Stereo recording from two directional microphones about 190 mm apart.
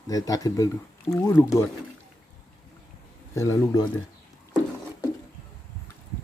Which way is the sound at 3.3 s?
15° left (ahead or behind).